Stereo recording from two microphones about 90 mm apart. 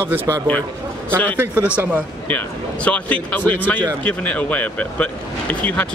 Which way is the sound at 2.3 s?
15° left (ahead or behind).